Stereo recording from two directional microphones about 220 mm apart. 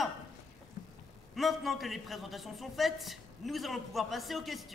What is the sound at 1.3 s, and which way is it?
A man's voice, centre (ahead or behind).